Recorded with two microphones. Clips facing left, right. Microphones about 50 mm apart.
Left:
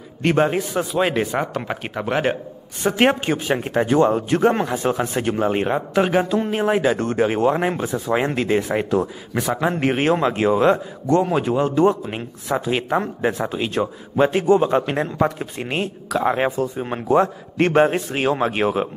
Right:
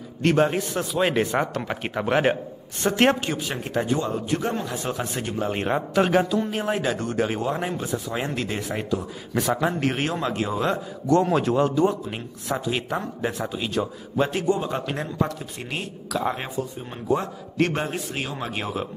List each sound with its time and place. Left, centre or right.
0.2 s a man's voice: centre
2.8 s a man's voice: centre
3.3 s speech: left
5.9 s a man's voice: centre
6.2 s speech: left
6.5 s speech: left
7.5 s speech: left
10.6 s speech: left
11.2 s a man's voice: centre
11.7 s speech: left
12.1 s speech: left
12.7 s speech: left
17.6 s speech: left